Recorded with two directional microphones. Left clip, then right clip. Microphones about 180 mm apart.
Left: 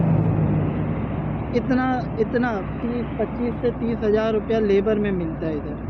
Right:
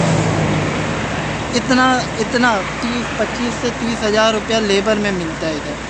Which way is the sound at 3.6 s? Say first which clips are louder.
Right 2 dB; 25° right (ahead or behind).